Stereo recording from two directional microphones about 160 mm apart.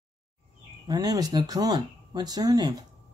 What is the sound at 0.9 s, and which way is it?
Speech, 25° right (ahead or behind).